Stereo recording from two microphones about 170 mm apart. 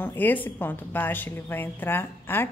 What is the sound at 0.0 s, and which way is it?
A woman's voice, 10° left (ahead or behind).